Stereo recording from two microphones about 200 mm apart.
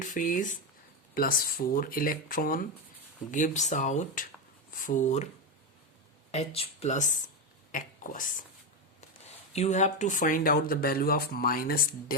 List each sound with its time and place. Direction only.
0.0 s speech: 40° left (ahead or behind)
6.3 s speech: 30° left (ahead or behind)
9.5 s speech: 35° left (ahead or behind)